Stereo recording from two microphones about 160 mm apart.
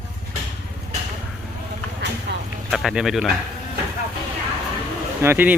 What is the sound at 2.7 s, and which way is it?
Speech, centre (ahead or behind).